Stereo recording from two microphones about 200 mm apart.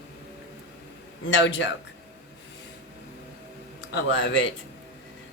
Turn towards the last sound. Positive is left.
turn(degrees=65)  # may be behind; listen again after turning